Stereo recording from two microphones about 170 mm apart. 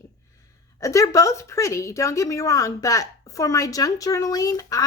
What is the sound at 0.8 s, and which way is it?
A woman's voice, 20° left (ahead or behind).